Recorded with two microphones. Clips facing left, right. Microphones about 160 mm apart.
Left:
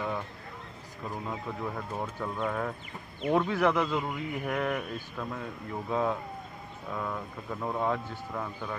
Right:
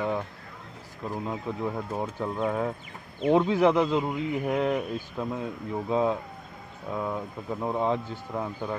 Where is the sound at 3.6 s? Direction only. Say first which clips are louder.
Right 5 dB; 30° right (ahead or behind).